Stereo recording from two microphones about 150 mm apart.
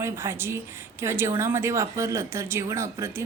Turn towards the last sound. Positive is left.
turn(degrees=-20)  # may be behind; listen again after turning